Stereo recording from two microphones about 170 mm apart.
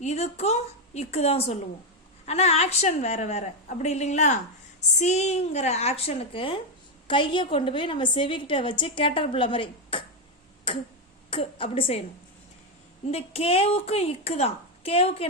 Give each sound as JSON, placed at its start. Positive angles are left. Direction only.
{"t": 0.0, "sound": "a woman's voice", "side_deg": 40}
{"t": 13.1, "sound": "speech", "side_deg": 35}